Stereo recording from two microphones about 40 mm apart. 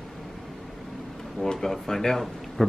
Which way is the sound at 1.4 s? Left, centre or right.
Centre.